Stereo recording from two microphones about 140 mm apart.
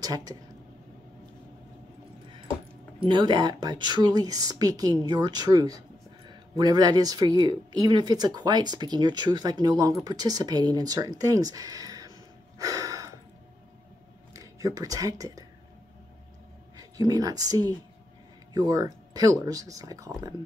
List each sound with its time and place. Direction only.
0.0 s speech: 25° right (ahead or behind)
3.0 s speech: 35° right (ahead or behind)
12.5 s a sound: 25° right (ahead or behind)
14.3 s speech: 25° right (ahead or behind)
16.7 s speech: 25° right (ahead or behind)